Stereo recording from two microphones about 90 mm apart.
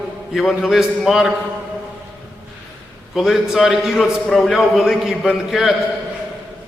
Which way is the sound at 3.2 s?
Centre (ahead or behind).